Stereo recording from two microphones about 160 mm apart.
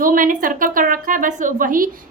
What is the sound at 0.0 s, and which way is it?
A woman's voice, 55° right (ahead or behind).